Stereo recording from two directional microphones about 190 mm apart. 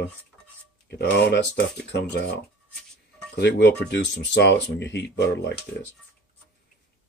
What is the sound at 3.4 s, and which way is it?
Speech, 65° left (ahead or behind).